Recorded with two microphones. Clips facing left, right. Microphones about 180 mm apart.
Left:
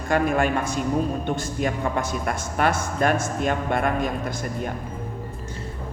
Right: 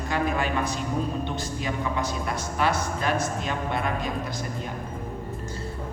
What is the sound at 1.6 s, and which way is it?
Speech, 55° left (ahead or behind).